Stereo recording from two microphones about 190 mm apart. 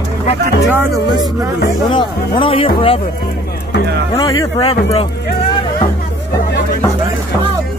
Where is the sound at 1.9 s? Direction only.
25° left (ahead or behind).